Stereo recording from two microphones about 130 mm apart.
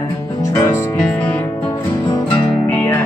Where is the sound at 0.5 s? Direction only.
20° left (ahead or behind).